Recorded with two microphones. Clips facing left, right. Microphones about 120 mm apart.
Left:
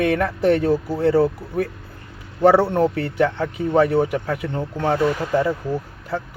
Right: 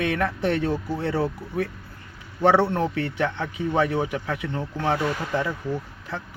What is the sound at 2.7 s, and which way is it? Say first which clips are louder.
A man's voice: left 6 dB; 35° left (ahead or behind).